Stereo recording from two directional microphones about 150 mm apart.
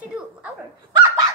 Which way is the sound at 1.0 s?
20° right (ahead or behind).